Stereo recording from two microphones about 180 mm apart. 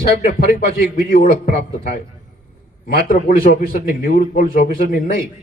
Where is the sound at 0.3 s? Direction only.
55° left (ahead or behind).